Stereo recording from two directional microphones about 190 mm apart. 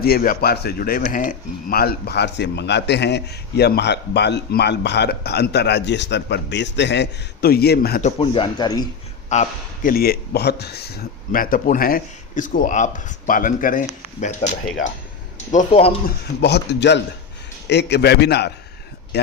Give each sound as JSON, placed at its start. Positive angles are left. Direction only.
{"t": 0.0, "sound": "speech", "side_deg": 50}
{"t": 8.0, "sound": "speech", "side_deg": 30}
{"t": 9.3, "sound": "a man's voice", "side_deg": 40}
{"t": 9.9, "sound": "speech", "side_deg": 55}
{"t": 15.5, "sound": "speech", "side_deg": 30}
{"t": 16.2, "sound": "speech", "side_deg": 60}